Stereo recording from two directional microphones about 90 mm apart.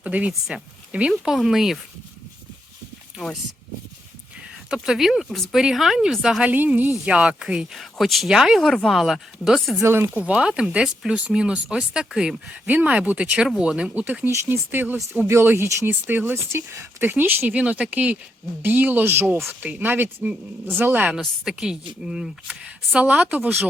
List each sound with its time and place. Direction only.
0.0 s speech: 15° right (ahead or behind)
1.1 s speech: centre (ahead or behind)
4.7 s speech: 5° right (ahead or behind)
6.4 s speech: 15° right (ahead or behind); by 9.8 s centre (ahead or behind)
9.8 s speech: 25° right (ahead or behind)
10.2 s speech: 10° right (ahead or behind)
21.2 s speech: 5° right (ahead or behind)